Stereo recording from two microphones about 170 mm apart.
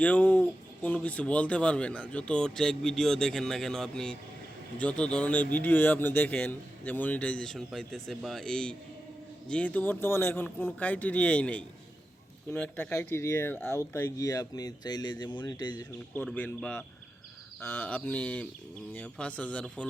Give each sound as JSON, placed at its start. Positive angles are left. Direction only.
{"t": 0.0, "sound": "a man's voice", "side_deg": 10}
{"t": 16.1, "sound": "a man's voice", "side_deg": 10}